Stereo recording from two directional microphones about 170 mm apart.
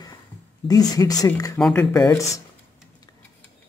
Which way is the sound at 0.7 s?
20° left (ahead or behind).